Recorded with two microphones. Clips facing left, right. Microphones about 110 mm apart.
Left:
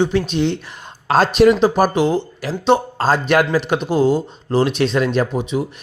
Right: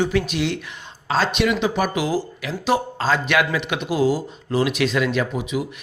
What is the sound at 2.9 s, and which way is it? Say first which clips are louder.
Speech: left 4 dB; 45° left (ahead or behind).